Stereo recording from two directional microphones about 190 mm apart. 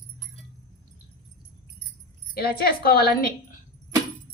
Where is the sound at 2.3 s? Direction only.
55° left (ahead or behind).